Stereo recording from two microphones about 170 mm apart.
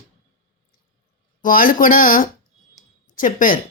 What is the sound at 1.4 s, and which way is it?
Speech, 55° left (ahead or behind).